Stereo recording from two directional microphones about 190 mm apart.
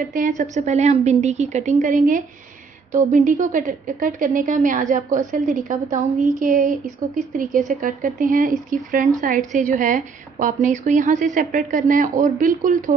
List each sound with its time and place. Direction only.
0.1 s a woman's voice: 40° right (ahead or behind)